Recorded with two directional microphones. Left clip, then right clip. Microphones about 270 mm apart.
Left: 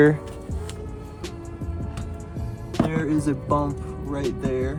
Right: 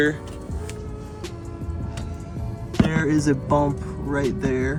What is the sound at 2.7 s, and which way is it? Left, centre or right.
Speech, centre.